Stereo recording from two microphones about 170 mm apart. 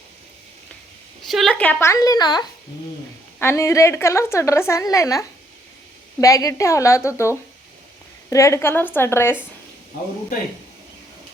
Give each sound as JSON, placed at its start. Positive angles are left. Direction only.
{"t": 1.2, "sound": "a woman's voice", "side_deg": 0}